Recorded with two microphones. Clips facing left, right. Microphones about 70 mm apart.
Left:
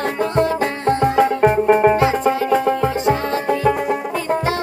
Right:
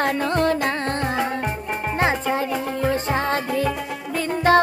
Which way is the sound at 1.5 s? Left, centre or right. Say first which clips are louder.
Left 14 dB; left.